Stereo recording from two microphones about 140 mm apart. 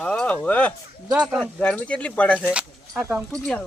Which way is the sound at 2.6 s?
10° right (ahead or behind).